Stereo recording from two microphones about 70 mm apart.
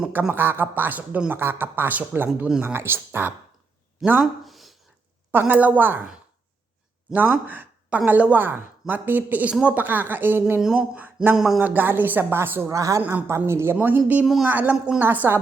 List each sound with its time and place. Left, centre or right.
0.1 s a woman's voice: right
4.4 s a sound: centre
5.3 s a woman's voice: right
7.1 s a woman's voice: right
10.8 s a sound: right
11.3 s speech: centre
11.6 s a woman's voice: right
12.6 s speech: right
13.0 s a woman's voice: right
13.5 s speech: right
13.7 s a woman's voice: right